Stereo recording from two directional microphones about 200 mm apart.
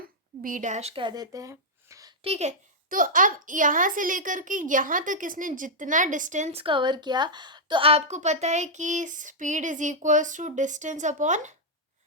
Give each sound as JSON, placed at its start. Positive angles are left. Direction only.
{"t": 0.4, "sound": "speech", "side_deg": -40}
{"t": 2.2, "sound": "a child's voice", "side_deg": -30}